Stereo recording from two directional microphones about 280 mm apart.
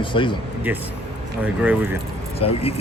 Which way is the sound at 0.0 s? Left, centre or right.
Centre.